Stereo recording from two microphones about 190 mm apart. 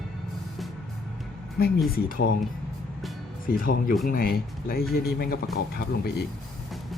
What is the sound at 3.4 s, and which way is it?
Speech, 50° left (ahead or behind).